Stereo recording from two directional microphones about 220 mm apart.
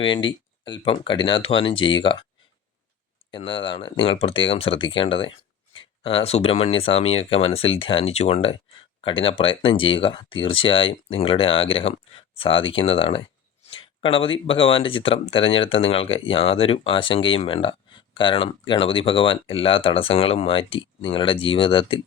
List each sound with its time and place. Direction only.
0.0 s speech: 20° left (ahead or behind)
3.3 s speech: 25° left (ahead or behind)